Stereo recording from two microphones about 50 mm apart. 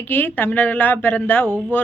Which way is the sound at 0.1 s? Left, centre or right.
Left.